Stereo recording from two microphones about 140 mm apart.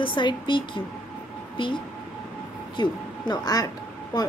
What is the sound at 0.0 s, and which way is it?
Speech, 35° left (ahead or behind).